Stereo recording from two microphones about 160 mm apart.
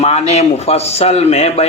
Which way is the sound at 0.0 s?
40° left (ahead or behind).